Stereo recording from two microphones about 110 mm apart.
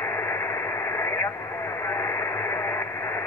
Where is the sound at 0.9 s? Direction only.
20° left (ahead or behind).